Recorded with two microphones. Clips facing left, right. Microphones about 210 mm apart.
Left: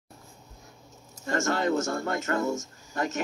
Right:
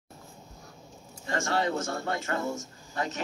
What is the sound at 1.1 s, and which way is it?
A man's voice, 45° left (ahead or behind).